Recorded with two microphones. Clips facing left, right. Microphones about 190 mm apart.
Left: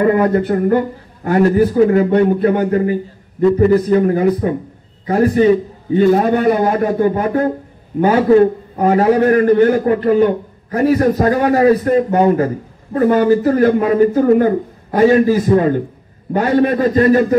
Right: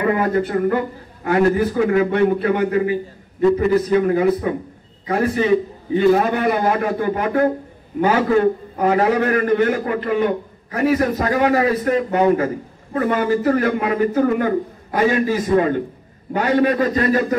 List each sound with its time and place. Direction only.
0.0 s a man's voice: 45° left (ahead or behind)